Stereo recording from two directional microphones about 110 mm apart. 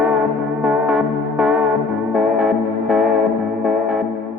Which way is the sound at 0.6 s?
10° right (ahead or behind).